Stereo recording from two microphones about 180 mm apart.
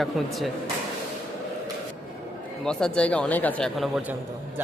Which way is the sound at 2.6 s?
5° left (ahead or behind).